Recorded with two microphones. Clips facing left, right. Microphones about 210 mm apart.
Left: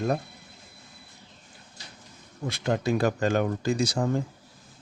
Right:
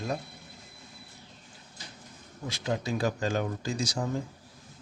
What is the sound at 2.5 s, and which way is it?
Speech, 60° left (ahead or behind).